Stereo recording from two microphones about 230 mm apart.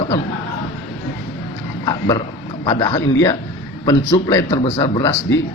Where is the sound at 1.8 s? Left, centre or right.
Centre.